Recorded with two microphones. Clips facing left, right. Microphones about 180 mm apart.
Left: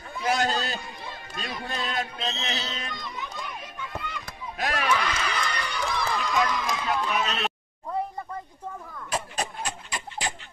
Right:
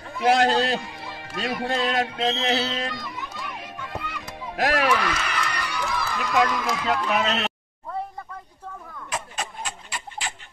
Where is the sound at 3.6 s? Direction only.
75° right (ahead or behind).